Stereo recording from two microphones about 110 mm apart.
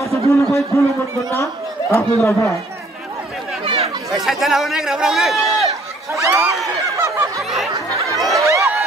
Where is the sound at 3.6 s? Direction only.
60° right (ahead or behind).